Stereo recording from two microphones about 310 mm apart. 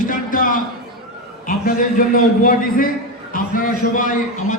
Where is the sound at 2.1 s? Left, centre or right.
Left.